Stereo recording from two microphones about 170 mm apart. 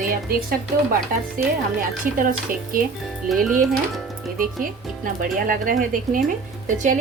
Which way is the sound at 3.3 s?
Centre (ahead or behind).